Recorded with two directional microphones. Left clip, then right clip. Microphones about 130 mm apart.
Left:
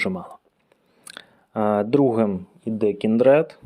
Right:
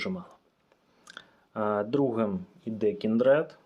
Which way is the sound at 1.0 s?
55° left (ahead or behind).